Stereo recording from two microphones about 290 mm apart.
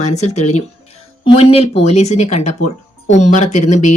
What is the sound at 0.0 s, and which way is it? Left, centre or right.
Speech, left.